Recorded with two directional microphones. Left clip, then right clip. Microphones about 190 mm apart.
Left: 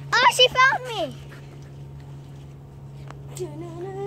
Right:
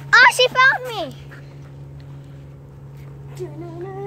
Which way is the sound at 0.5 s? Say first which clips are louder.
Right 4 dB; 15° left (ahead or behind).